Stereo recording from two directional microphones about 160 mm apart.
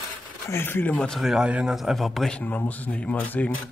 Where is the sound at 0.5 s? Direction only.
15° left (ahead or behind).